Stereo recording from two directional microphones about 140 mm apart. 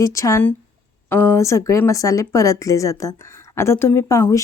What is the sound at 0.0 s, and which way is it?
A woman's voice, 20° left (ahead or behind).